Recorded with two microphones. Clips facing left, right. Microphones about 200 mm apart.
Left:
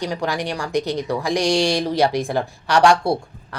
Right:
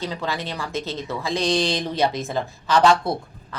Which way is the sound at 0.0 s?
15° left (ahead or behind).